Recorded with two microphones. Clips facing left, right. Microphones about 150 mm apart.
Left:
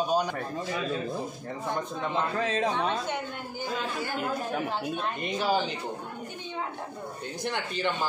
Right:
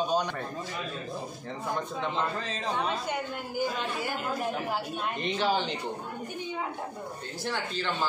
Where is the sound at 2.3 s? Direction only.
60° left (ahead or behind).